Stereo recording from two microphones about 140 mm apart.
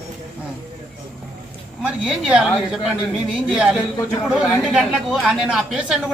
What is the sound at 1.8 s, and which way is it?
Speech, 5° right (ahead or behind).